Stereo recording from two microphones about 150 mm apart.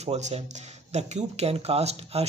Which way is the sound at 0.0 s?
45° right (ahead or behind).